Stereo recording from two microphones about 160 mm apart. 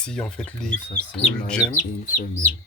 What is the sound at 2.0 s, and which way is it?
Speech, 60° left (ahead or behind).